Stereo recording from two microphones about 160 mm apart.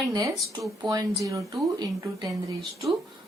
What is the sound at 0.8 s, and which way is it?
A woman's voice, 25° right (ahead or behind).